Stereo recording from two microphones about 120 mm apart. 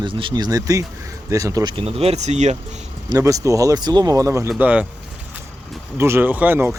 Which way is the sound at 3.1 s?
25° right (ahead or behind).